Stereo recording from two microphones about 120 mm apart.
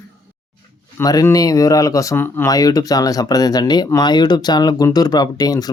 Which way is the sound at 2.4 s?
30° left (ahead or behind).